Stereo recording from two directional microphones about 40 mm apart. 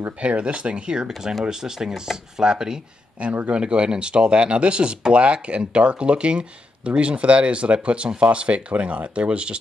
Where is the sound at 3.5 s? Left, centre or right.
Right.